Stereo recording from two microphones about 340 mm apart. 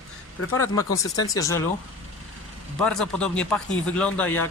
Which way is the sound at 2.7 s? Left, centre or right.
Centre.